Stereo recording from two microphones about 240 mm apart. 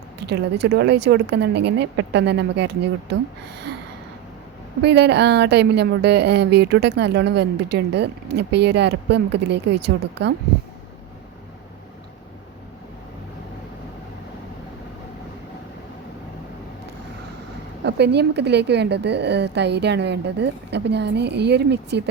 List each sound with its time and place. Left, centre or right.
0.2 s a woman's voice: right
4.8 s a woman's voice: right
17.8 s a woman's voice: right